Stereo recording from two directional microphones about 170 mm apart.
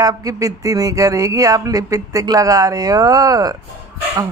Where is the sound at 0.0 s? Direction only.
20° right (ahead or behind).